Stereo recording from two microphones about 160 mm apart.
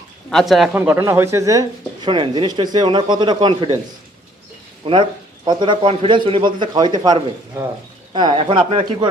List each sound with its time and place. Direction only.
0.3 s speech: centre (ahead or behind)
0.7 s speech: 15° right (ahead or behind); by 3.7 s 30° right (ahead or behind)
4.8 s speech: 35° right (ahead or behind)